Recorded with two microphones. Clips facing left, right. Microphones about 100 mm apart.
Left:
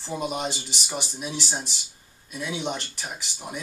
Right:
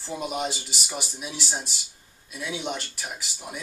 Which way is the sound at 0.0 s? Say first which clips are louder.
Left 1 dB; centre (ahead or behind).